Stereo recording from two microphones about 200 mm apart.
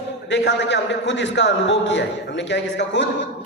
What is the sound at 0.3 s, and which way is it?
A man's voice, 60° left (ahead or behind).